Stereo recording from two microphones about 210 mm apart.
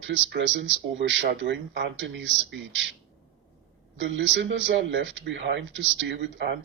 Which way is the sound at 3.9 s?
60° right (ahead or behind).